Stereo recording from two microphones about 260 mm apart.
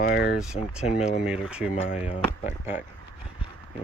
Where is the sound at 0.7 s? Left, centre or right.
Centre.